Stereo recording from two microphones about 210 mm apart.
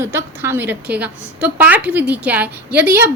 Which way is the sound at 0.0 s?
10° right (ahead or behind).